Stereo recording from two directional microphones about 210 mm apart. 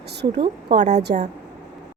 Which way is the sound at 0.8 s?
35° right (ahead or behind).